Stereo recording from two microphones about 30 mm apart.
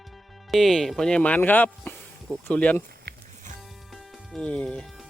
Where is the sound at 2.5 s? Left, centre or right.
Left.